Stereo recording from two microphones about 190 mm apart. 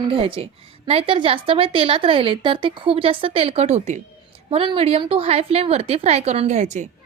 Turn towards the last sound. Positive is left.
turn(degrees=-35)  # may be behind; listen again after turning